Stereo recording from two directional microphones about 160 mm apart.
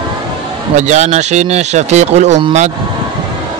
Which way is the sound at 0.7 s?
45° right (ahead or behind).